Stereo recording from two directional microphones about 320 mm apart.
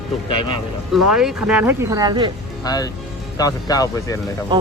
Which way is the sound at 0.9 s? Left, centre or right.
Centre.